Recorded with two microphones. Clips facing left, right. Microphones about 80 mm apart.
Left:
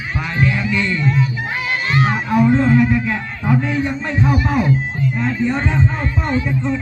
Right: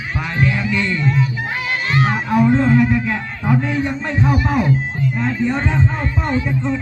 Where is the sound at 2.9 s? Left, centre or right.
Right.